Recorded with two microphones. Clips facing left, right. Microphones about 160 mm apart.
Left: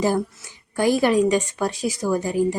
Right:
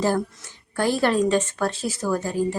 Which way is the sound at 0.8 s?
15° left (ahead or behind).